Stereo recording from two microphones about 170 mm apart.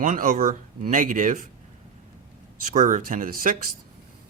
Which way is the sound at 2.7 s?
50° right (ahead or behind).